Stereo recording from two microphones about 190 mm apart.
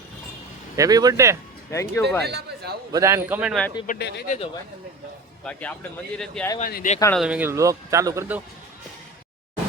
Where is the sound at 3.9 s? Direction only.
45° left (ahead or behind).